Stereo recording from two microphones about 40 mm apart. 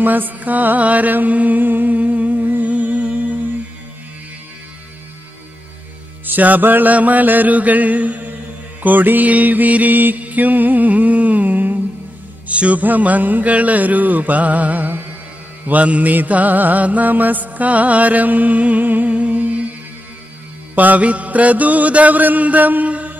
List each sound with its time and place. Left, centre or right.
0.0 s mantra: right
6.2 s mantra: right
12.4 s a man's voice: right
12.8 s mantra: right
19.1 s humming: right
20.7 s mantra: right